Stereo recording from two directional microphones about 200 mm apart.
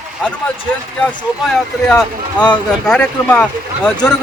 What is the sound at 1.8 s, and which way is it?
Speech, 5° left (ahead or behind).